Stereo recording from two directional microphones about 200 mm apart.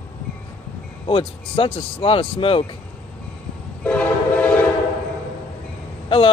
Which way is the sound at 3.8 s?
5° left (ahead or behind).